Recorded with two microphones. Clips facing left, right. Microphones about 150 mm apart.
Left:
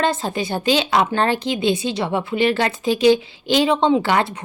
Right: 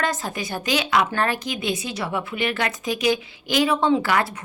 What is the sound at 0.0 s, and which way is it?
Speech, 25° left (ahead or behind).